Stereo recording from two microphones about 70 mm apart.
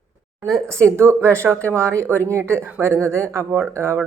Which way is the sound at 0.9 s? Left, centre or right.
Right.